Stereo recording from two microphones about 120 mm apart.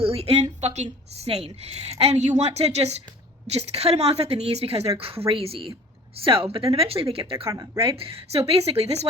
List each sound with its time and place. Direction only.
0.0 s speech: 55° right (ahead or behind)
7.5 s speech: 30° right (ahead or behind)
7.9 s speech: 50° right (ahead or behind)